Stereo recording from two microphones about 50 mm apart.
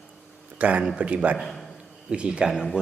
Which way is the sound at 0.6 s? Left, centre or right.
Right.